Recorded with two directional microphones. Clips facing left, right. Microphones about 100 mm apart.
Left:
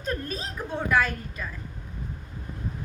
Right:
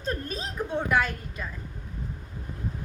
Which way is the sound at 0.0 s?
25° right (ahead or behind).